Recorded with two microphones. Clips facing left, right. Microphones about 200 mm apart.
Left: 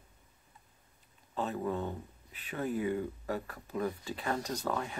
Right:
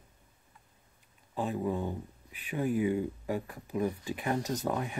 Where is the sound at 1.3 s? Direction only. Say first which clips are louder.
Right 2 dB; 15° right (ahead or behind).